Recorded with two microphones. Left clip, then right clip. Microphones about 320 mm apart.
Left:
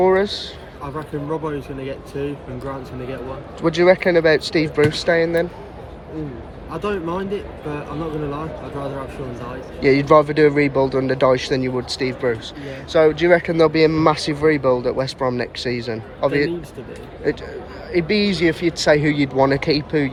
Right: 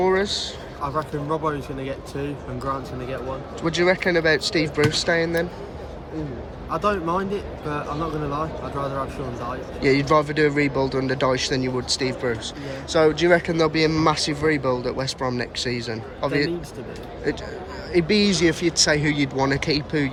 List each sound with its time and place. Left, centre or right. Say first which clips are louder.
0.0 s speech: left 4 dB; centre
3.6 s speech: left 6 dB; centre
6.7 s speech: right 2 dB; centre
9.8 s speech: left 5 dB; centre
17.9 s speech: left 1 dB; centre